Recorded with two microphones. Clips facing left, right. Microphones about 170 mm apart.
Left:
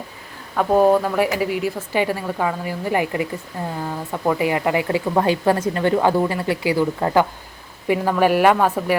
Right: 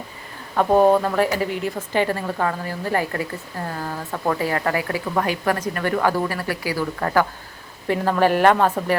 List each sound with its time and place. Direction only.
0.5 s a woman's voice: centre (ahead or behind)